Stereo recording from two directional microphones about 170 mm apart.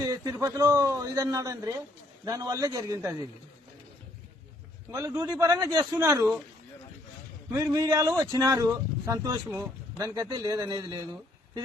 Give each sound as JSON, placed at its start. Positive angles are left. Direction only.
{"t": 0.0, "sound": "speech", "side_deg": -20}
{"t": 4.9, "sound": "speech", "side_deg": -20}
{"t": 7.5, "sound": "speech", "side_deg": -20}